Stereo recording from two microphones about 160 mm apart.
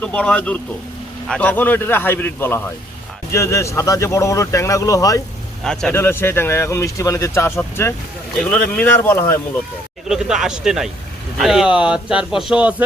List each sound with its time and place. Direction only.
0.0 s speech: 10° left (ahead or behind)
5.6 s speech: 5° left (ahead or behind)
5.9 s speech: 15° left (ahead or behind)
10.1 s speech: 5° right (ahead or behind)